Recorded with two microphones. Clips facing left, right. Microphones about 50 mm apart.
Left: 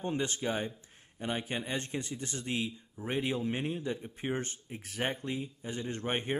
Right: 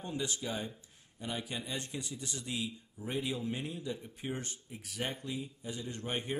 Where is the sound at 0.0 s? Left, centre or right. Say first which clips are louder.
Left 5 dB; left.